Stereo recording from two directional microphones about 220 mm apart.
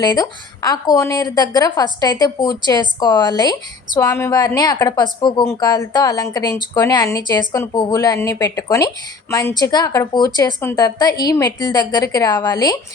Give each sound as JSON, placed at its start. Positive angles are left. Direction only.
{"t": 0.0, "sound": "a woman's voice", "side_deg": 20}